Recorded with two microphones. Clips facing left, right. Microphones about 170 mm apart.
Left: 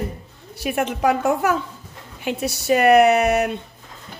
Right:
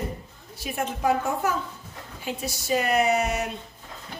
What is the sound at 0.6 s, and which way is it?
A woman's voice, 75° left (ahead or behind).